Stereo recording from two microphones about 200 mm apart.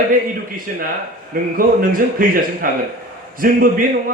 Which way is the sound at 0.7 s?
45° right (ahead or behind).